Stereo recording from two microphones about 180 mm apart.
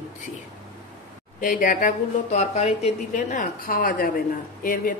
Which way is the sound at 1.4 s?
50° left (ahead or behind).